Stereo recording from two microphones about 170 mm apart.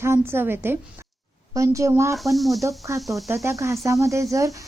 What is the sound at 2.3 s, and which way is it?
Speech, centre (ahead or behind).